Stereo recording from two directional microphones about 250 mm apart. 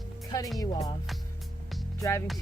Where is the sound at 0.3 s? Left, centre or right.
Centre.